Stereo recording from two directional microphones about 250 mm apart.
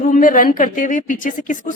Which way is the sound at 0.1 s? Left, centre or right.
Left.